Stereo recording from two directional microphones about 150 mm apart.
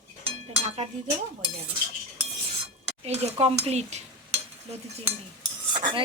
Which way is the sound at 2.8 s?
45° right (ahead or behind).